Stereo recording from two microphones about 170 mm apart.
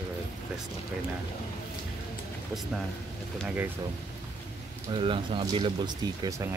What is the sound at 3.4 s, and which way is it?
Speech, 10° right (ahead or behind).